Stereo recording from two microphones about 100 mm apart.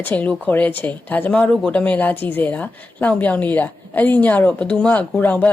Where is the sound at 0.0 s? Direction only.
15° left (ahead or behind).